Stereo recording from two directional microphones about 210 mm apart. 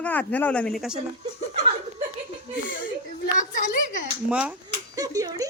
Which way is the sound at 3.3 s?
35° left (ahead or behind).